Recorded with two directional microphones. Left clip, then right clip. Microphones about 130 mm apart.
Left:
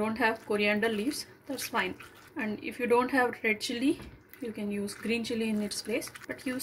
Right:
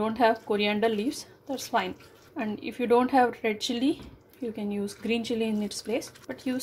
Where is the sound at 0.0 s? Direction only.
30° right (ahead or behind).